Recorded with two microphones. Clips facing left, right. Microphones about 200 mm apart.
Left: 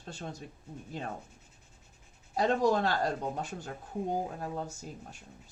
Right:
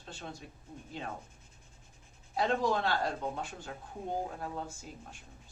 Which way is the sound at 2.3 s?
40° left (ahead or behind).